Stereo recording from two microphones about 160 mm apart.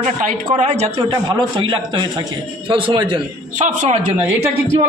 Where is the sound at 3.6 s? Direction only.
45° right (ahead or behind).